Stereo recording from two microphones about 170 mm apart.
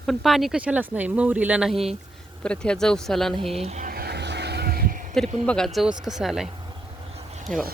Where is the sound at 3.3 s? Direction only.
35° right (ahead or behind).